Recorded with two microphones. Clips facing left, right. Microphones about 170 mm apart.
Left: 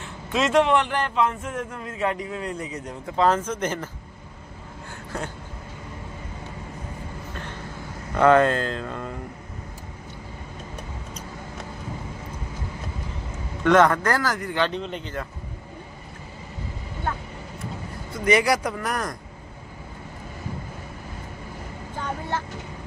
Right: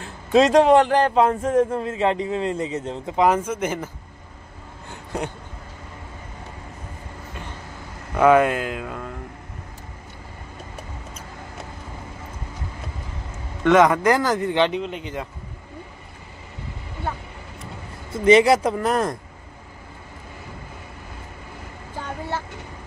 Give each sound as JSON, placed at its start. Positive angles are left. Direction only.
{"t": 0.0, "sound": "a man's voice", "side_deg": -35}
{"t": 8.1, "sound": "speech", "side_deg": -10}
{"t": 13.7, "sound": "speech", "side_deg": -10}
{"t": 14.8, "sound": "speech", "side_deg": -5}
{"t": 18.1, "sound": "a man's voice", "side_deg": -25}